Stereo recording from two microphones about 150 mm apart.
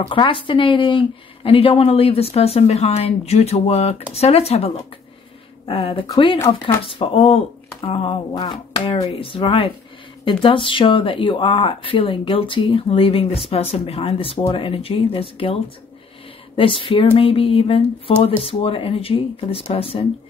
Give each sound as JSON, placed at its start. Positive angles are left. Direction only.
{"t": 0.0, "sound": "speech", "side_deg": 35}